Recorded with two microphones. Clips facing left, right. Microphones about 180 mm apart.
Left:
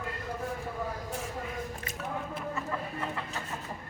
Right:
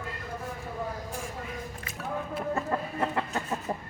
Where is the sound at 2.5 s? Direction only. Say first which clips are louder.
Right 5 dB; 50° right (ahead or behind).